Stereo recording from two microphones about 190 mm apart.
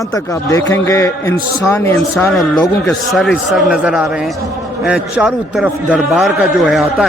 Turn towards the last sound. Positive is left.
turn(degrees=0)  # may be behind; listen again after turning